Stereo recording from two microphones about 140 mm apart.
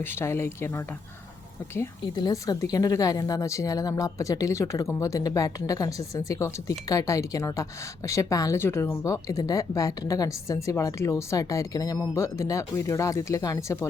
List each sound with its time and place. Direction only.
0.0 s speech: 15° left (ahead or behind)
2.1 s a woman's voice: 30° left (ahead or behind)